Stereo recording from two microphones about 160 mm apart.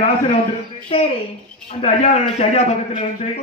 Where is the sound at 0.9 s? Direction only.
35° left (ahead or behind).